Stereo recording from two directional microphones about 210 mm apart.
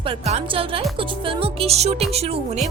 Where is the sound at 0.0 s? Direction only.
30° right (ahead or behind).